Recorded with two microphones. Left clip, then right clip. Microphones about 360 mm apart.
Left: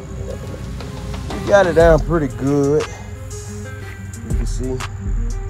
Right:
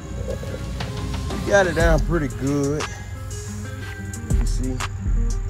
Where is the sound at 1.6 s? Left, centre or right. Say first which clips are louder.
Left 8 dB; left.